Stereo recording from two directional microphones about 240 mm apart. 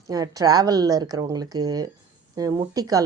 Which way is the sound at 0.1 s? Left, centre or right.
Centre.